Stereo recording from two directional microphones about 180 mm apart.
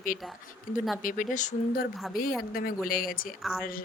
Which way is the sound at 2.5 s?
55° left (ahead or behind).